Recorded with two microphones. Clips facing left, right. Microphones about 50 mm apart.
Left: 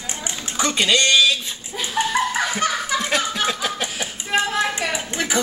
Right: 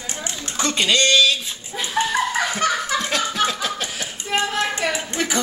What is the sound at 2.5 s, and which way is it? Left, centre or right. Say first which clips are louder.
Snicker: right 1 dB; centre.